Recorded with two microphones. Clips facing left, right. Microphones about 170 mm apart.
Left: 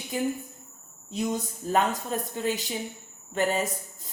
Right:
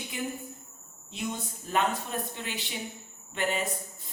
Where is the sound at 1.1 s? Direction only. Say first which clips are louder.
Left 6 dB; 40° left (ahead or behind).